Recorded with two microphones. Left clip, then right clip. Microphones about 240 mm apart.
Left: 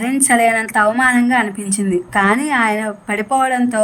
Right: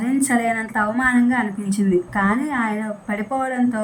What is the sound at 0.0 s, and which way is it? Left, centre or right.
A woman's voice, left.